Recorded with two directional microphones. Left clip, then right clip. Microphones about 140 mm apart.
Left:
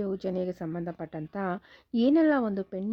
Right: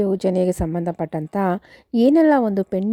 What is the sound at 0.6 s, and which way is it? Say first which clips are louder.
A woman's voice: right 11 dB; 50° right (ahead or behind).